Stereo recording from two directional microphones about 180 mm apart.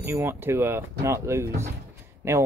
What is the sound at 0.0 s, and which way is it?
Speech, 15° right (ahead or behind).